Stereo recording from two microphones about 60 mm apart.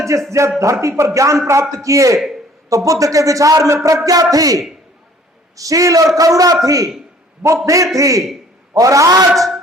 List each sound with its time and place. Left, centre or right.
0.3 s a man's voice: right
5.5 s a man's voice: right
7.4 s a man's voice: right
9.3 s music: centre